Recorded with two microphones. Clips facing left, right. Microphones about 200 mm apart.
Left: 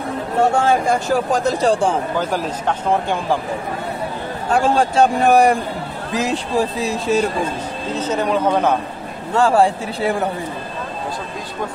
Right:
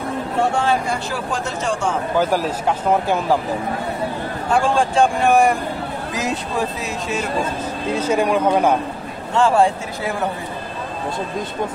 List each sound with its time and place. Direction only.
0.4 s speech: 45° left (ahead or behind)
2.1 s speech: 10° right (ahead or behind)
4.5 s speech: 40° left (ahead or behind)
7.9 s speech: 10° right (ahead or behind)
9.3 s speech: 35° left (ahead or behind)